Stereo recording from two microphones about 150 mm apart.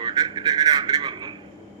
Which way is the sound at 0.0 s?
30° right (ahead or behind).